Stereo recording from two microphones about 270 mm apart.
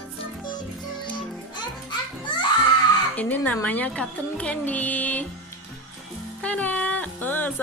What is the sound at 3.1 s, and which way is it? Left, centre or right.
Speech, centre.